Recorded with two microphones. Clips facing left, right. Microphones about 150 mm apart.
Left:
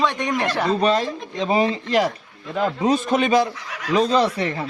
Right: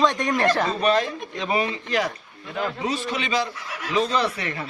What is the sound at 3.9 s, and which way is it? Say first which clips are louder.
Speech: left 5 dB; 35° left (ahead or behind).